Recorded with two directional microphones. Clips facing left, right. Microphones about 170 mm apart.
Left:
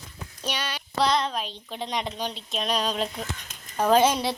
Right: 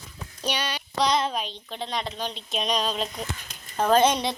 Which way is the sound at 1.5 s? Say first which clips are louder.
Even; 10° left (ahead or behind).